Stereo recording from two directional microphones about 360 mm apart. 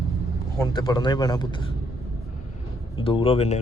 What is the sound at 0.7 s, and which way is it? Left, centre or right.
A man's voice, centre.